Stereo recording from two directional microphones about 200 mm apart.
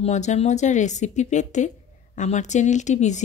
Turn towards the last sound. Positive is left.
turn(degrees=35)  # may be behind; listen again after turning